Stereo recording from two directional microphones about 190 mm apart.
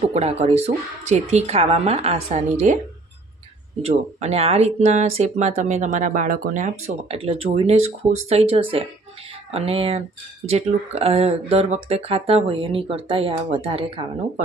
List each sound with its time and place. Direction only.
0.0 s speech: 35° right (ahead or behind)
3.8 s speech: 35° right (ahead or behind)